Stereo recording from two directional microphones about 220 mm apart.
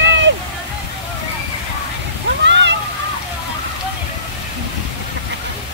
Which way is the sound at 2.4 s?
55° right (ahead or behind).